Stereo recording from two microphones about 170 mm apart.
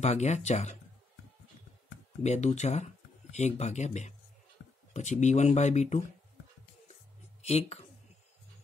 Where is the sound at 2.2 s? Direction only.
40° left (ahead or behind).